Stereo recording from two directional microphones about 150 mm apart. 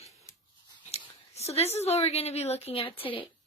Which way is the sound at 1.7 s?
45° left (ahead or behind).